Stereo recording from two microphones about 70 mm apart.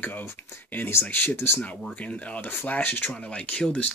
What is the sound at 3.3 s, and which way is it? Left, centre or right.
Speech, centre.